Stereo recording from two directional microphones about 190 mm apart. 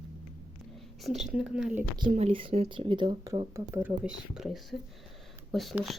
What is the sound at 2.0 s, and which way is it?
Speech, 35° right (ahead or behind).